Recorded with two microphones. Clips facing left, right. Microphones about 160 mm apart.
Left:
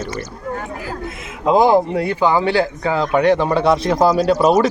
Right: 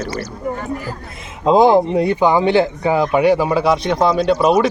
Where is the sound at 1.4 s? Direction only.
20° right (ahead or behind).